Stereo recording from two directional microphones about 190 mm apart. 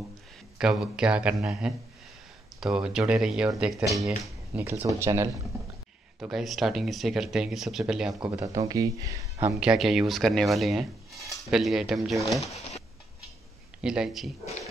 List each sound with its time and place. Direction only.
0.6 s speech: 5° right (ahead or behind)
3.8 s speech: 15° right (ahead or behind)
6.1 s speech: 5° right (ahead or behind)
8.5 s speech: 20° right (ahead or behind)
9.5 s speech: 5° right (ahead or behind)
13.7 s speech: 5° right (ahead or behind)